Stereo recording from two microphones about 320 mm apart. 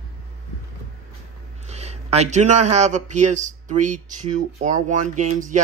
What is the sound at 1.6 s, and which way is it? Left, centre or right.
Speech, centre.